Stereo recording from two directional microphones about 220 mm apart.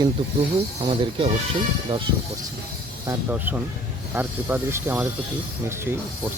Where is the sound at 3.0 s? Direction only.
10° right (ahead or behind).